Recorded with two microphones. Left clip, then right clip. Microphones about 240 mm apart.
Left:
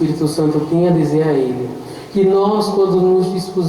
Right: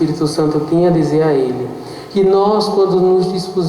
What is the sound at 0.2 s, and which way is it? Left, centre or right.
Speech, left.